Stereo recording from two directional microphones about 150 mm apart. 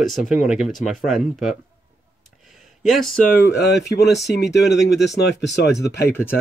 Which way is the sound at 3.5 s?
90° left.